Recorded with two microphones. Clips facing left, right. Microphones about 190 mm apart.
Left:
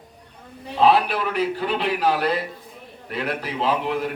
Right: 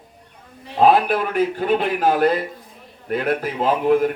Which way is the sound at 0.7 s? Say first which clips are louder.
Right 3 dB; 50° right (ahead or behind).